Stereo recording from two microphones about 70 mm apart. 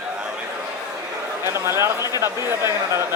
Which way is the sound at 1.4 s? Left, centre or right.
Right.